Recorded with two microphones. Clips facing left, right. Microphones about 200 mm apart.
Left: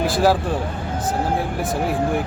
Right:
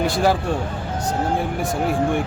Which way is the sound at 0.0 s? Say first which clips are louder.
Left 1 dB; centre (ahead or behind).